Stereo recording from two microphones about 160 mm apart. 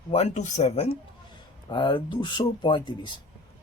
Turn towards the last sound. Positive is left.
turn(degrees=30)  # may be behind; listen again after turning